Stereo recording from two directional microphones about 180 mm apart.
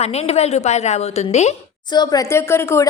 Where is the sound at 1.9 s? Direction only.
25° left (ahead or behind).